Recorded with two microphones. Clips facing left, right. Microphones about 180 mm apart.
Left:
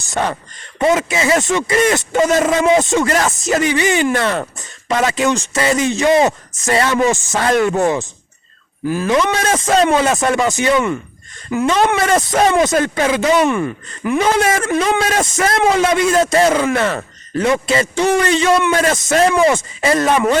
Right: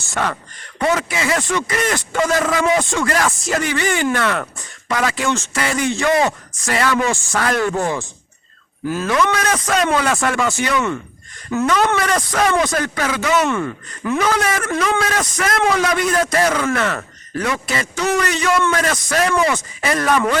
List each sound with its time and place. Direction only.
0.0 s speech: 20° left (ahead or behind)
9.0 s speech: 25° left (ahead or behind)
13.4 s speech: 10° left (ahead or behind)
14.2 s speech: 25° left (ahead or behind)